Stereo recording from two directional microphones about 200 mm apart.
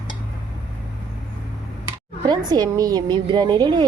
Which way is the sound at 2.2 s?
20° right (ahead or behind).